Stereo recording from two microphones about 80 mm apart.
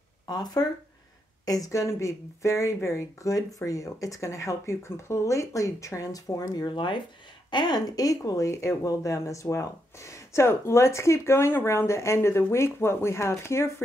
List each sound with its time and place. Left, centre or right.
0.3 s speech: left
7.5 s speech: left